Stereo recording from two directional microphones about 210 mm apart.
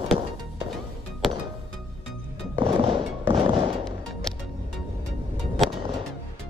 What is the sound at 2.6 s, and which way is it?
Music, 25° right (ahead or behind).